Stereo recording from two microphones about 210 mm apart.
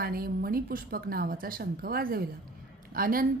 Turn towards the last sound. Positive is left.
turn(degrees=-45)  # may be behind; listen again after turning